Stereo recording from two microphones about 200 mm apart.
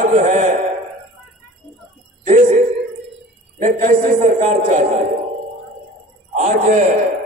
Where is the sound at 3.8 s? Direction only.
40° right (ahead or behind).